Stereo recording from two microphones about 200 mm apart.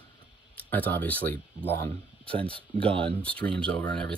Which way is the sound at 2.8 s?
25° right (ahead or behind).